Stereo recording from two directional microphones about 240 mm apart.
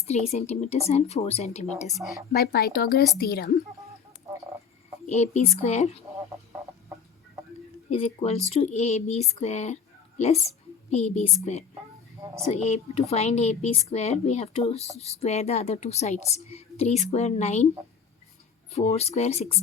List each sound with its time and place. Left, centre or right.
0.1 s a woman's voice: left
1.9 s a woman's voice: centre
2.3 s speech: left
5.0 s a woman's voice: left
7.9 s a woman's voice: left
12.2 s speech: centre
12.5 s a woman's voice: left
18.7 s a woman's voice: left